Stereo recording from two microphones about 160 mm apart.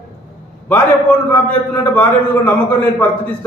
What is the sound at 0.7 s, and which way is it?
A man's voice, 10° left (ahead or behind).